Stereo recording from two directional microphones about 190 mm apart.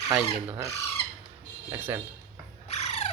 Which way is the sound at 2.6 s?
35° left (ahead or behind).